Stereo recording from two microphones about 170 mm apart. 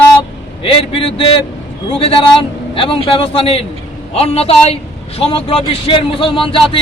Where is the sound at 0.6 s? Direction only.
35° left (ahead or behind).